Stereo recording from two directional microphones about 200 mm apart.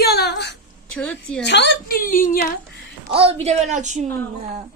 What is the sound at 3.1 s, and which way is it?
Speech, 30° right (ahead or behind).